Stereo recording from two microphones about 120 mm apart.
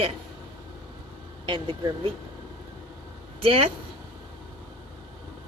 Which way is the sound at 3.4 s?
50° right (ahead or behind).